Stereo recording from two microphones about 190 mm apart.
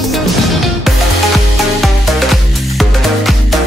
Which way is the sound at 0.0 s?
Centre (ahead or behind).